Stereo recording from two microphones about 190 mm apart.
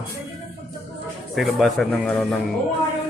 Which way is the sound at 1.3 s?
Centre (ahead or behind).